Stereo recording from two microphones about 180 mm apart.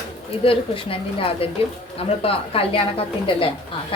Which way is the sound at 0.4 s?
30° left (ahead or behind).